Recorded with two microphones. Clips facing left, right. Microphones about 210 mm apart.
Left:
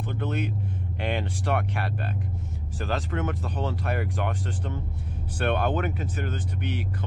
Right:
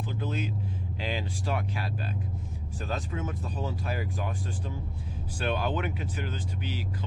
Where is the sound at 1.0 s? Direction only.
65° left (ahead or behind).